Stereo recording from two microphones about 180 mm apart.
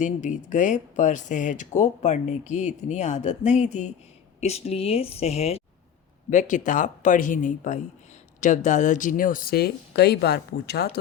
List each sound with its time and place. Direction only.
0.0 s speech: 45° left (ahead or behind)
6.3 s speech: 45° left (ahead or behind); by 10.9 s 65° left (ahead or behind)